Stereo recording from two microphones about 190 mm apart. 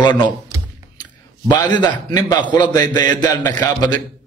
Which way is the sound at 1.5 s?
25° left (ahead or behind).